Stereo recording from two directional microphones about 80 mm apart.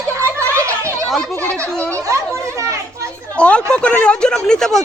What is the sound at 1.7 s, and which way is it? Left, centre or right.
Speech, centre.